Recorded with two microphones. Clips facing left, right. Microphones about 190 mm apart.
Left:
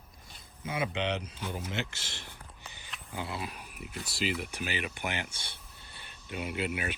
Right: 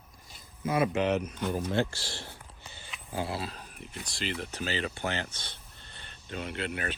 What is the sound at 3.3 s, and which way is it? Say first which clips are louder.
Speech: right 3 dB; 15° left (ahead or behind).